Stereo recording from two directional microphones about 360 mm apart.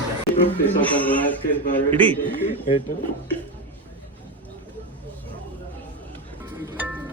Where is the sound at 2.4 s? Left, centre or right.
Centre.